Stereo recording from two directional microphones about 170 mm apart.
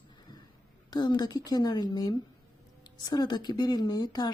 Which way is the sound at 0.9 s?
25° left (ahead or behind).